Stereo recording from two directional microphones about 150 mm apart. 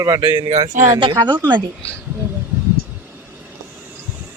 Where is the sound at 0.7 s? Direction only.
55° right (ahead or behind).